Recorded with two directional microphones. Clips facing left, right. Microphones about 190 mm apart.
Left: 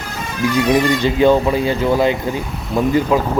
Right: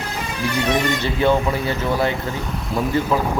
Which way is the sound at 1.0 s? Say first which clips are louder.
Left 5 dB; 15° left (ahead or behind).